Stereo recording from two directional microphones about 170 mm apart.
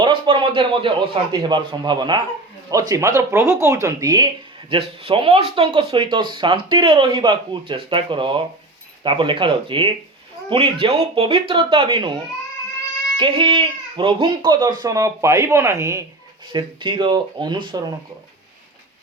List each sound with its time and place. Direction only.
0.0 s speech: 30° right (ahead or behind)
13.1 s speech: 30° right (ahead or behind)